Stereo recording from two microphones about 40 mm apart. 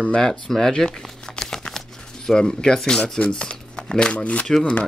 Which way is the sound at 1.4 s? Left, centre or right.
Centre.